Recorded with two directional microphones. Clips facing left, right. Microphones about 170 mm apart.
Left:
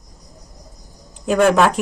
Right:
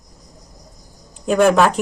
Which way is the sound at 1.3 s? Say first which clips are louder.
Right 1 dB; centre (ahead or behind).